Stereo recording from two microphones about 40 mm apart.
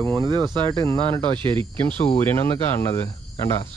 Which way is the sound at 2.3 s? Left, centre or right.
Left.